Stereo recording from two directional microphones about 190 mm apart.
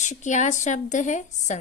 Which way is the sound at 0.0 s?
40° left (ahead or behind).